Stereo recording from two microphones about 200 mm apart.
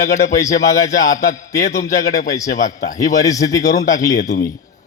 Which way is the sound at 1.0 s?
40° left (ahead or behind).